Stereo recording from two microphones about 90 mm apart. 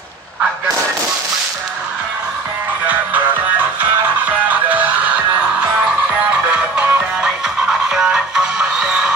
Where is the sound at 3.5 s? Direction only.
20° right (ahead or behind).